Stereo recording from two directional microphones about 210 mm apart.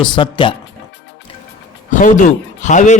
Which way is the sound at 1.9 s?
40° left (ahead or behind).